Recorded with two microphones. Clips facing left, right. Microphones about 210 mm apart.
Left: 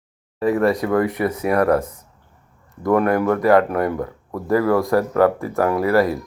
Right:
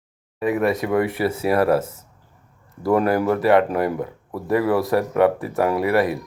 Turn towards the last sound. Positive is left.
turn(degrees=-20)  # may be behind; listen again after turning